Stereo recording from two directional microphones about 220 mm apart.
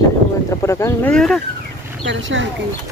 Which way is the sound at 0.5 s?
15° left (ahead or behind).